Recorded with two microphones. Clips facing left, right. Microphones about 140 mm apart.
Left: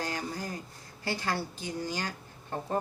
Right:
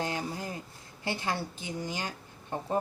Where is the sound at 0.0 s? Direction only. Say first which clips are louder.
Right 1 dB; 25° right (ahead or behind).